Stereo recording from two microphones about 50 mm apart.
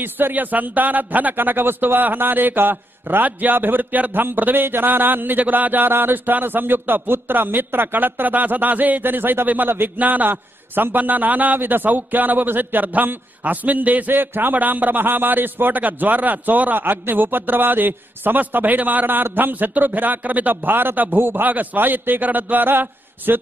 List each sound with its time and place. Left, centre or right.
0.0 s a man's voice: right